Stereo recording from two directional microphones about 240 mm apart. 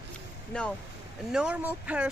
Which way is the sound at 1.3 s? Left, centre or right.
Centre.